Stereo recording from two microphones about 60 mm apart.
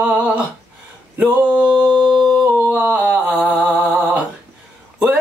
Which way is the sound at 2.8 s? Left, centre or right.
Centre.